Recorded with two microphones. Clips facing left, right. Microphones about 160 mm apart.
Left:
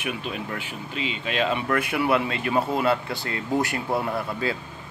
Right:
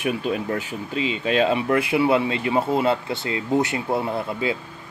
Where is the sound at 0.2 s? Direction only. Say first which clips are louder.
Right 7 dB; 40° right (ahead or behind).